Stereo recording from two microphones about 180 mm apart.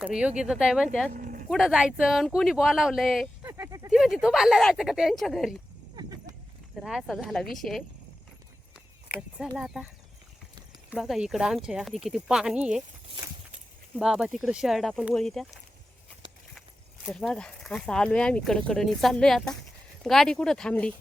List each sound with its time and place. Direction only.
0.0 s speech: 5° right (ahead or behind)
1.1 s a sound: 50° right (ahead or behind)
1.5 s speech: centre (ahead or behind)
3.4 s a sound: 15° right (ahead or behind)
3.8 s speech: centre (ahead or behind)
6.0 s horse: 20° right (ahead or behind)
6.7 s speech: centre (ahead or behind)
9.6 s speech: centre (ahead or behind)
10.8 s speech: centre (ahead or behind)
13.9 s speech: 5° right (ahead or behind)
17.1 s speech: 5° left (ahead or behind)